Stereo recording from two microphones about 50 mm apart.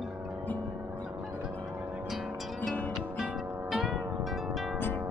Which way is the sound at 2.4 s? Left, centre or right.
Centre.